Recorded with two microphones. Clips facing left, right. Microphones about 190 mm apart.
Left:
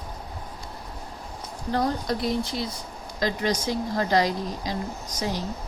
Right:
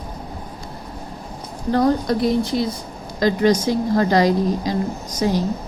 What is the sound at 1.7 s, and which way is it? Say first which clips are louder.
Speech: right 8 dB; 60° right (ahead or behind).